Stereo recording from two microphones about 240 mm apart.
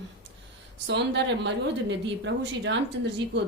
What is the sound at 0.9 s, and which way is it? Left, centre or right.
Speech, right.